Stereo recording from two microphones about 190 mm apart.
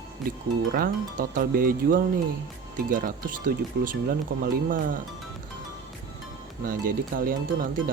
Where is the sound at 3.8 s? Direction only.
60° right (ahead or behind).